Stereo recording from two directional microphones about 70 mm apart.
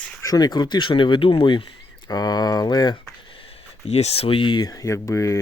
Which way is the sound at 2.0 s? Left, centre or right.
Left.